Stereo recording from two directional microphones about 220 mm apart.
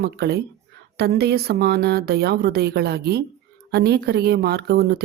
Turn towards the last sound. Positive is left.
turn(degrees=-45)  # may be behind; listen again after turning